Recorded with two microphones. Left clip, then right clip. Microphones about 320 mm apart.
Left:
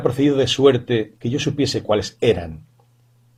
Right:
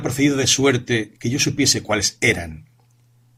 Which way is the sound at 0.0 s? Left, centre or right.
Right.